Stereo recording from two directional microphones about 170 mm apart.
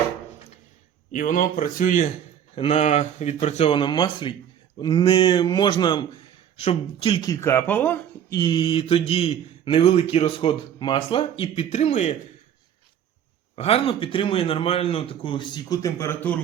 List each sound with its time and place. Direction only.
1.1 s speech: 55° left (ahead or behind)
2.6 s speech: 35° left (ahead or behind)
7.3 s speech: 15° left (ahead or behind)
8.4 s speech: 25° left (ahead or behind); by 12.1 s 40° left (ahead or behind)
13.6 s speech: 35° left (ahead or behind); by 16.4 s 10° left (ahead or behind)